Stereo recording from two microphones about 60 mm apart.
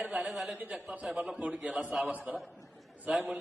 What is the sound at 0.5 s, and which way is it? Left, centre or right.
Speech, right.